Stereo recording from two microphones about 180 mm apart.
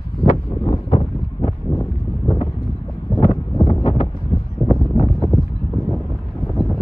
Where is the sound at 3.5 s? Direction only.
20° left (ahead or behind).